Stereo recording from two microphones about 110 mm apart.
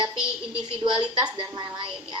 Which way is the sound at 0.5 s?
50° right (ahead or behind).